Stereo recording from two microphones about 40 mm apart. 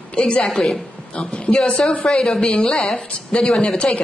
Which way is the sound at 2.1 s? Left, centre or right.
Centre.